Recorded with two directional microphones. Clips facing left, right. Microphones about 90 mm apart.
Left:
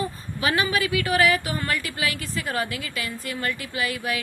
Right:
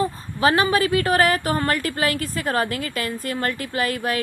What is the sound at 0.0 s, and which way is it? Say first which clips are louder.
A woman's voice: right 6 dB; 35° right (ahead or behind).